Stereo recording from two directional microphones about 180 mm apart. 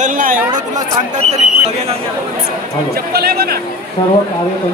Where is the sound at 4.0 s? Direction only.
25° left (ahead or behind).